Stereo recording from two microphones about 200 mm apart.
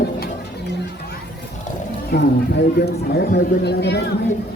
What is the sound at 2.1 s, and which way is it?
Speech, 50° left (ahead or behind).